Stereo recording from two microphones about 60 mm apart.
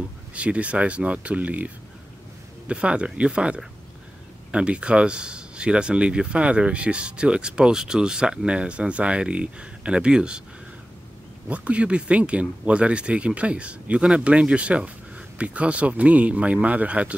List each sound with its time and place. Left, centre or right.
0.3 s speech: right
2.7 s speech: centre
11.4 s speech: right